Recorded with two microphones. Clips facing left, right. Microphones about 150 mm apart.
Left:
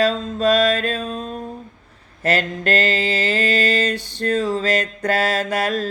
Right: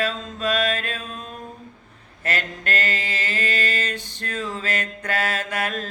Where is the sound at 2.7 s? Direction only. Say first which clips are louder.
Left 7 dB; 35° left (ahead or behind).